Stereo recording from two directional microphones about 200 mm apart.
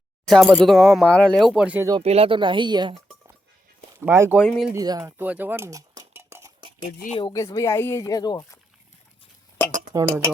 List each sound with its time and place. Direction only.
0.3 s speech: centre (ahead or behind)
1.9 s speech: 30° right (ahead or behind)
4.0 s speech: 10° right (ahead or behind)
4.4 s speech: centre (ahead or behind)
4.7 s speech: 15° right (ahead or behind)
6.8 s speech: 40° left (ahead or behind)
7.2 s speech: 20° left (ahead or behind)
9.9 s speech: 15° right (ahead or behind)